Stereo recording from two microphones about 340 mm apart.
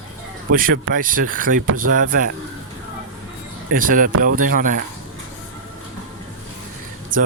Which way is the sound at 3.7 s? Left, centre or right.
Right.